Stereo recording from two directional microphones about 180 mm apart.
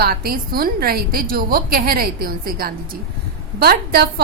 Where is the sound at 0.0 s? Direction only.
55° right (ahead or behind).